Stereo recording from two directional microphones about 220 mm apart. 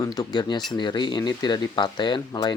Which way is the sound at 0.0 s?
15° left (ahead or behind).